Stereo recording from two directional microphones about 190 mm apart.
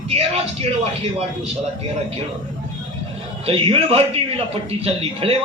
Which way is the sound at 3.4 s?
30° right (ahead or behind).